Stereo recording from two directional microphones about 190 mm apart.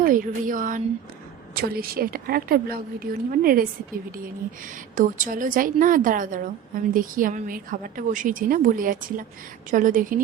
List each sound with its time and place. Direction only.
0.0 s a woman's voice: 45° right (ahead or behind)
4.9 s a woman's voice: 45° right (ahead or behind)